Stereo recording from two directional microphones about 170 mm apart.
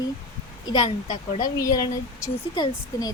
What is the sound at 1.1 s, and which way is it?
Speech, 45° left (ahead or behind).